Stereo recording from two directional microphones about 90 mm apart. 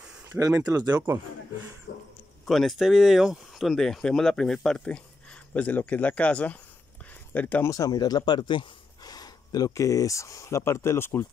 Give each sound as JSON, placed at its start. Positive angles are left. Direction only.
{"t": 0.4, "sound": "speech", "side_deg": -40}
{"t": 2.4, "sound": "speech", "side_deg": 0}
{"t": 7.6, "sound": "speech", "side_deg": 40}
{"t": 9.1, "sound": "speech", "side_deg": 45}